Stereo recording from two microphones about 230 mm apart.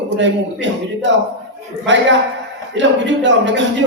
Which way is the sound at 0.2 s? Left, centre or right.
Right.